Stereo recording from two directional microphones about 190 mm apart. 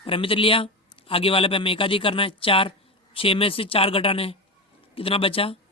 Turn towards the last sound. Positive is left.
turn(degrees=30)  # may be behind; listen again after turning